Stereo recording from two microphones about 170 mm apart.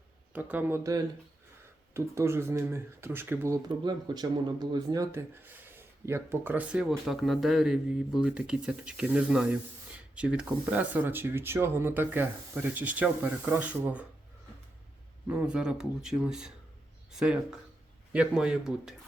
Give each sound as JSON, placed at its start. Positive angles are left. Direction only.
{"t": 0.3, "sound": "speech", "side_deg": -10}
{"t": 15.3, "sound": "speech", "side_deg": -5}